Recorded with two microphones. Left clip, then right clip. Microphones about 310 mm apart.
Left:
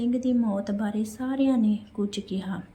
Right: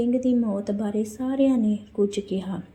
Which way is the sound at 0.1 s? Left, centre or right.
Centre.